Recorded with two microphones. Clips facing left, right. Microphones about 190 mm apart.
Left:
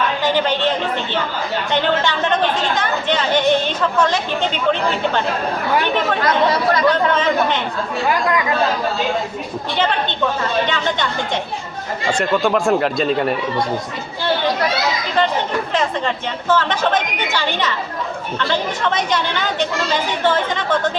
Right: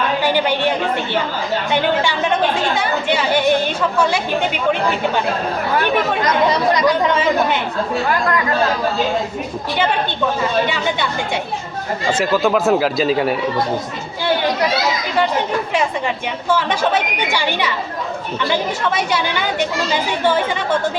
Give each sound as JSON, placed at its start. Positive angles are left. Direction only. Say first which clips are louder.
{"t": 0.2, "sound": "a woman's voice", "louder": "even", "side_deg": -10}
{"t": 6.2, "sound": "a woman's voice", "louder": "even", "side_deg": -20}
{"t": 10.4, "sound": "a woman's voice", "louder": "right 1 dB", "side_deg": -10}
{"t": 12.1, "sound": "speech", "louder": "right 1 dB", "side_deg": -5}
{"t": 15.7, "sound": "a woman's voice", "louder": "even", "side_deg": -10}